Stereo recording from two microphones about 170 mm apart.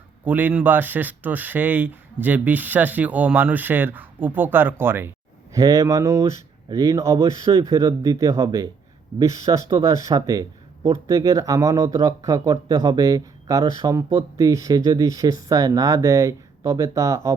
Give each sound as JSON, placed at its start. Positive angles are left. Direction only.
{"t": 0.3, "sound": "speech", "side_deg": -10}